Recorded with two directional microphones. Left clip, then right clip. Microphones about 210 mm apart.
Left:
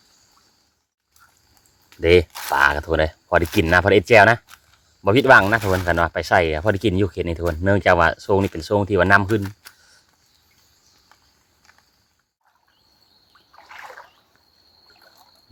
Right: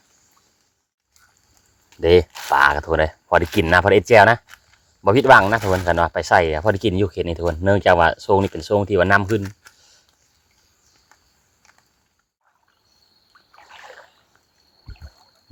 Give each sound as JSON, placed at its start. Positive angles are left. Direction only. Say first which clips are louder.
{"t": 2.0, "sound": "speech", "louder": "right 1 dB", "side_deg": -5}
{"t": 13.7, "sound": "splash", "louder": "left 3 dB", "side_deg": 0}